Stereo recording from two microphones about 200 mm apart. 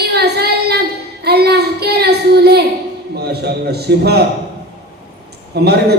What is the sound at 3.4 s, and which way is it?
Speech, 55° right (ahead or behind).